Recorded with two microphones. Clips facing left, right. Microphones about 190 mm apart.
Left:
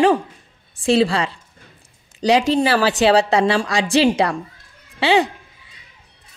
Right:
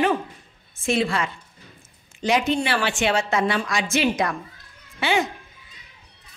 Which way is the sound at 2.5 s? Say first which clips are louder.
Left 6 dB; 35° left (ahead or behind).